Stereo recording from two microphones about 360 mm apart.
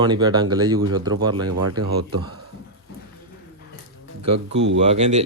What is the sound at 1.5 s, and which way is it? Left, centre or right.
Speech, right.